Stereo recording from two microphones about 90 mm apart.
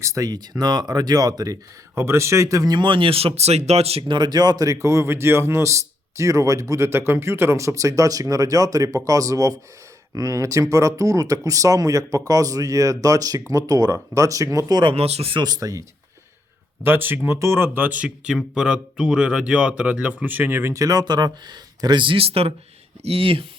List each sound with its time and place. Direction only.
0.0 s speech: 40° right (ahead or behind)
2.0 s speech: 30° right (ahead or behind)
2.7 s speech: 65° right (ahead or behind); by 3.3 s 90° right
3.9 s speech: 60° right (ahead or behind); by 14.8 s 35° right (ahead or behind)
14.8 s speech: 75° right (ahead or behind)
15.4 s speech: 45° right (ahead or behind)
16.8 s speech: 25° right (ahead or behind); by 21.0 s 40° right (ahead or behind)
21.0 s speech: 55° right (ahead or behind); by 23.5 s 90° right